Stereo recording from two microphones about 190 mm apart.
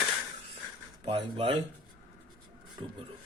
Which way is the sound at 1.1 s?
30° right (ahead or behind).